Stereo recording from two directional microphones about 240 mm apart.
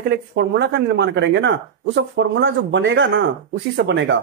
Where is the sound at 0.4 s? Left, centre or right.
Right.